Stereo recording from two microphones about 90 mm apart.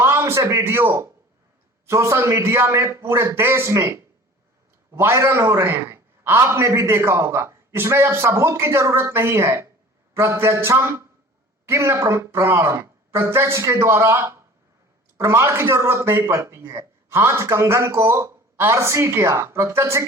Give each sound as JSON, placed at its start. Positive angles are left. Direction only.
{"t": 0.0, "sound": "a man's voice", "side_deg": -30}